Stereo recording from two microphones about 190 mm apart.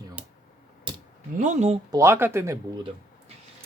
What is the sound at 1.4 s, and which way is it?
Speech, 40° right (ahead or behind).